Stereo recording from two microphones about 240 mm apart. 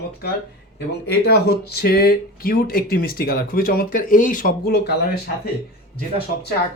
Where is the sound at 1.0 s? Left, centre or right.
Left.